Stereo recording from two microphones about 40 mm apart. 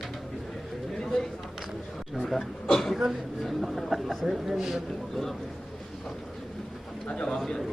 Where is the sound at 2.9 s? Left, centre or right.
Centre.